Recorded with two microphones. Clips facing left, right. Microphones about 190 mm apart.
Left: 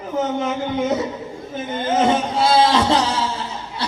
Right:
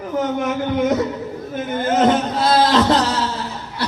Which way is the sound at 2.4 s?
10° left (ahead or behind).